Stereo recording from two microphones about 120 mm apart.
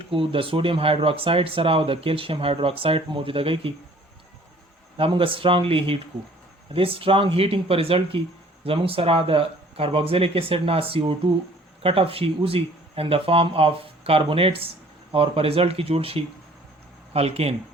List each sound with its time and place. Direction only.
0.1 s speech: 45° right (ahead or behind)
4.9 s speech: 50° right (ahead or behind)